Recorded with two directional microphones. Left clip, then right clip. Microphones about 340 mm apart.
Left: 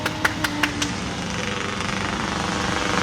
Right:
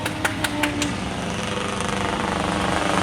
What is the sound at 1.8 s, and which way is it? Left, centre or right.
Vehicle, centre.